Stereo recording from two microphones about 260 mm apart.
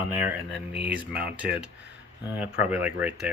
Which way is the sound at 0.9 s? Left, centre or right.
Centre.